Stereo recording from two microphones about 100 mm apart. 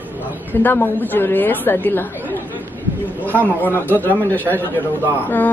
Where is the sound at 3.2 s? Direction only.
15° left (ahead or behind).